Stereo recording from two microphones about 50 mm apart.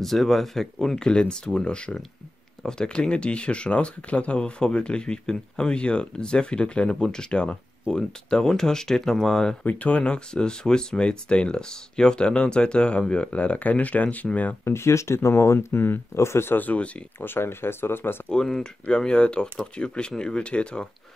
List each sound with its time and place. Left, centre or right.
0.0 s speech: centre
9.7 s speech: left
14.6 s speech: left
16.5 s speech: left
17.2 s speech: left
18.3 s speech: centre